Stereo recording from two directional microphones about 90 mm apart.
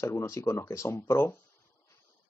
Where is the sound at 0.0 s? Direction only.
30° left (ahead or behind).